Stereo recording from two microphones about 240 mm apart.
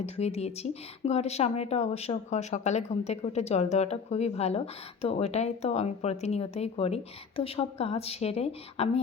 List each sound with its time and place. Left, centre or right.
0.0 s speech: left